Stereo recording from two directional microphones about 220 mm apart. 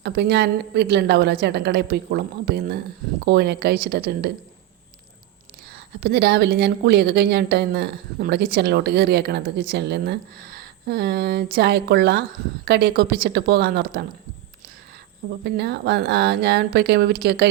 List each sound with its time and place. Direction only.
0.0 s a woman's voice: 50° right (ahead or behind)
6.0 s a woman's voice: 50° right (ahead or behind)
15.4 s a woman's voice: 50° right (ahead or behind)